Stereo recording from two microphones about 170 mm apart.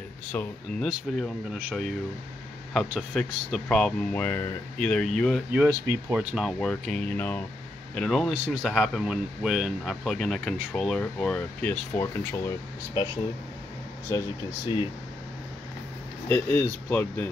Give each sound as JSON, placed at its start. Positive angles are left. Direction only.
{"t": 0.3, "sound": "speech", "side_deg": 10}
{"t": 0.8, "sound": "speech", "side_deg": 0}
{"t": 2.7, "sound": "speech", "side_deg": 0}
{"t": 5.9, "sound": "speech", "side_deg": -15}
{"t": 6.3, "sound": "speech", "side_deg": 0}
{"t": 16.3, "sound": "speech", "side_deg": 10}